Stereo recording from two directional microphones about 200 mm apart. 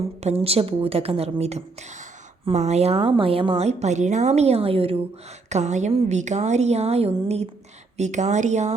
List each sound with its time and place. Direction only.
0.2 s a woman's voice: 30° right (ahead or behind)